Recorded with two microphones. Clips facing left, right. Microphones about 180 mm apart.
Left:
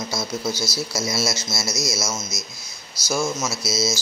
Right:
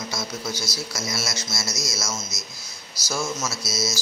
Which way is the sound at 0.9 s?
25° left (ahead or behind).